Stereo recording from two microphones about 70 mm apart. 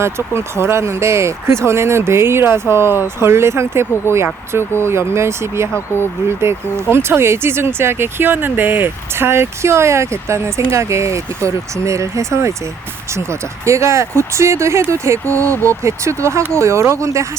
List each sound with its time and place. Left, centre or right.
0.0 s speech: right
13.7 s speech: right